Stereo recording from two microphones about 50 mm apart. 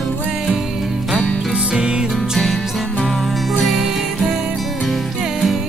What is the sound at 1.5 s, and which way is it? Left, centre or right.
Music, right.